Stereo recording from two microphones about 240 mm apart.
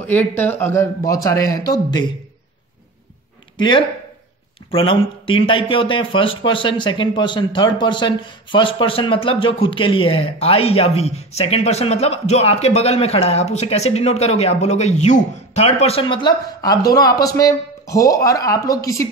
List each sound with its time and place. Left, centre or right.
0.4 s speech: centre
3.5 s speech: centre